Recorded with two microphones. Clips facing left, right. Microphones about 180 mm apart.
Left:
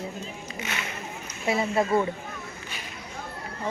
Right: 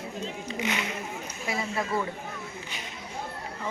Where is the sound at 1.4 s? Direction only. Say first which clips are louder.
Left 7 dB; 30° left (ahead or behind).